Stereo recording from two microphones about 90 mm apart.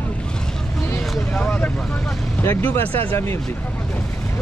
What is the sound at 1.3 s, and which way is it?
Vehicle, 15° left (ahead or behind).